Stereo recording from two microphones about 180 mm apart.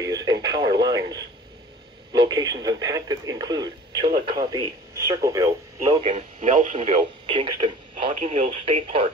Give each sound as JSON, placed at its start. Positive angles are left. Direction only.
{"t": 0.0, "sound": "radio", "side_deg": -20}
{"t": 2.1, "sound": "speech", "side_deg": -20}
{"t": 5.9, "sound": "speech", "side_deg": -35}